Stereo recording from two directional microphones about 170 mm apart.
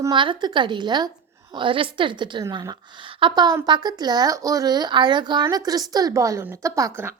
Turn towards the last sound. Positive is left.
turn(degrees=-15)  # may be behind; listen again after turning